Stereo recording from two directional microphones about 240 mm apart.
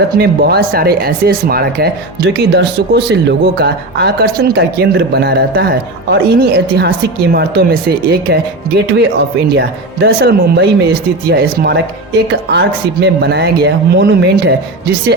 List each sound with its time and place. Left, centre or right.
0.1 s speech: right
9.5 s speech: right